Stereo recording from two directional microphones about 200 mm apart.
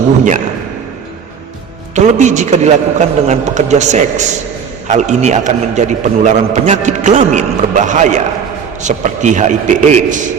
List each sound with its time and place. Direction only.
2.1 s a man's voice: 35° right (ahead or behind)